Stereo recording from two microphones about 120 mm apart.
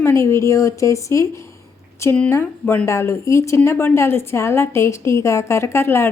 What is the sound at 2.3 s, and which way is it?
A woman's voice, 20° left (ahead or behind).